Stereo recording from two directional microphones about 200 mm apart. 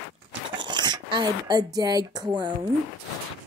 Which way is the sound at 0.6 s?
20° right (ahead or behind).